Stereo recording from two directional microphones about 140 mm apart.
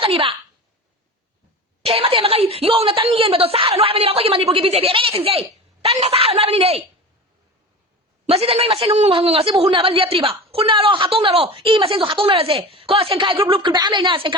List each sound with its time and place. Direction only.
0.0 s a child's voice: 40° right (ahead or behind)
1.8 s speech: 45° right (ahead or behind)
8.3 s a man's voice: 45° right (ahead or behind)